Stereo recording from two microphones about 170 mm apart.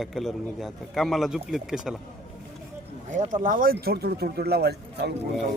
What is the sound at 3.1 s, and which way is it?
Speech, 45° right (ahead or behind).